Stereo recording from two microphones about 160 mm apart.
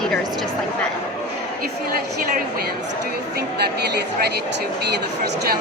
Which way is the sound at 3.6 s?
90° right.